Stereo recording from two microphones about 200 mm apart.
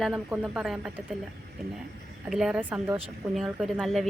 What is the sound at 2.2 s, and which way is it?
Speech, centre (ahead or behind).